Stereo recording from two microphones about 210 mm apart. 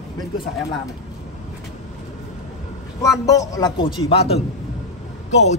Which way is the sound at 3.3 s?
15° left (ahead or behind).